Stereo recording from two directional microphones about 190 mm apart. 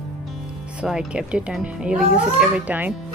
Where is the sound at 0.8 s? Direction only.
5° right (ahead or behind).